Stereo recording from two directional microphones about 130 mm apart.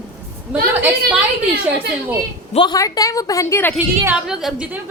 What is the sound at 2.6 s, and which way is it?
A woman's voice, 30° left (ahead or behind).